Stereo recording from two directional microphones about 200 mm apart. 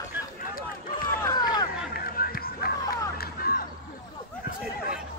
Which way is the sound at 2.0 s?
45° left (ahead or behind).